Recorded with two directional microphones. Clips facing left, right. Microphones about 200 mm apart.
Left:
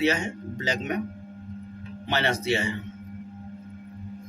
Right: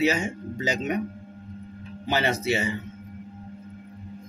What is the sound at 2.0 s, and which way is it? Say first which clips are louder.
Speech: right 1 dB; 5° right (ahead or behind).